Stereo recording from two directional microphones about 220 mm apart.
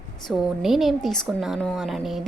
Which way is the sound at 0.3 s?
Centre (ahead or behind).